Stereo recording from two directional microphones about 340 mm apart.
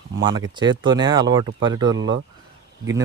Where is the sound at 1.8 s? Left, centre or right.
Right.